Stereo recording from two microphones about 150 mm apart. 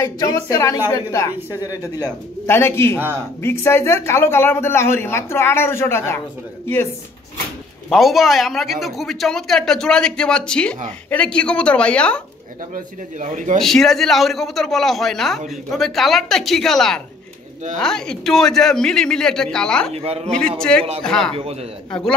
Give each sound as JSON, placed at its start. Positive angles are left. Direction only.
{"t": 0.0, "sound": "a woman's voice", "side_deg": 25}
{"t": 7.9, "sound": "a man's voice", "side_deg": 0}
{"t": 12.7, "sound": "a man's voice", "side_deg": -55}
{"t": 13.6, "sound": "a man's voice", "side_deg": 0}
{"t": 19.9, "sound": "speech", "side_deg": -45}
{"t": 20.2, "sound": "a man's voice", "side_deg": 5}